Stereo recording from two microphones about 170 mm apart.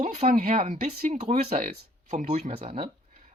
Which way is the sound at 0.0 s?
40° right (ahead or behind).